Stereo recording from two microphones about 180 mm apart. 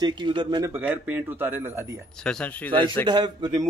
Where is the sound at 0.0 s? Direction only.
25° right (ahead or behind).